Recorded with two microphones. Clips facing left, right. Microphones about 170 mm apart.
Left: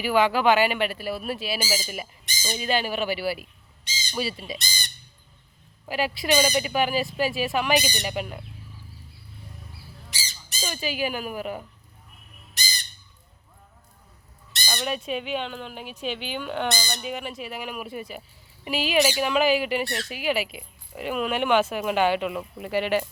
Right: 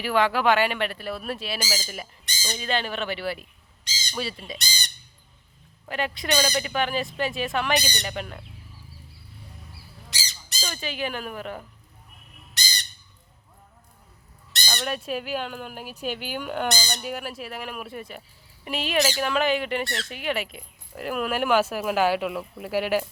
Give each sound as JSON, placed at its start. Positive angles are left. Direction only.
{"t": 0.0, "sound": "speech", "side_deg": 5}
{"t": 3.8, "sound": "squawk", "side_deg": -85}
{"t": 4.1, "sound": "speech", "side_deg": 5}
{"t": 4.6, "sound": "squawk", "side_deg": -75}
{"t": 5.8, "sound": "speech", "side_deg": 5}
{"t": 10.2, "sound": "squawk", "side_deg": -80}
{"t": 10.6, "sound": "speech", "side_deg": 10}
{"t": 14.6, "sound": "speech", "side_deg": 5}